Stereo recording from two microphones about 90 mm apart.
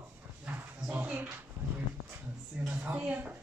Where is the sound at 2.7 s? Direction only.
20° right (ahead or behind).